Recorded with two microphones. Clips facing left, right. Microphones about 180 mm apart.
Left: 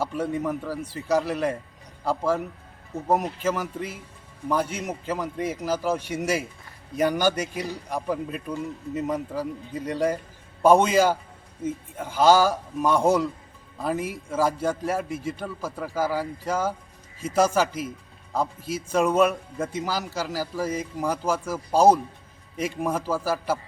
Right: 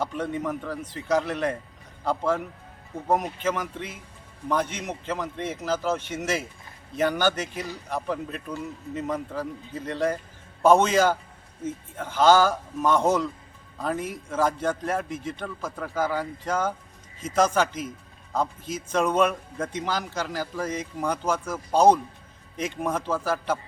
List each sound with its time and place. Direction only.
0.0 s speech: 5° left (ahead or behind)